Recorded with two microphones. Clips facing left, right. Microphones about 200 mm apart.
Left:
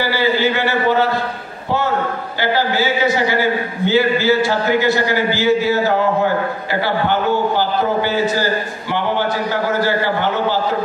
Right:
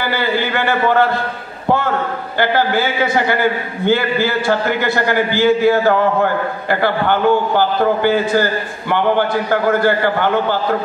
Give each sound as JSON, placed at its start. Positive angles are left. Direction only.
{"t": 0.0, "sound": "a sound", "side_deg": -55}
{"t": 2.4, "sound": "a man's voice", "side_deg": -55}
{"t": 9.5, "sound": "a man's voice", "side_deg": -55}